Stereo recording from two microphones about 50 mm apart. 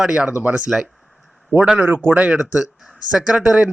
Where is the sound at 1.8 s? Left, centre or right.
Right.